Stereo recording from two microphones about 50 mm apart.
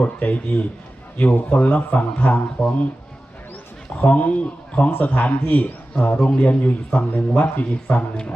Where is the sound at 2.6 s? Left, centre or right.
Left.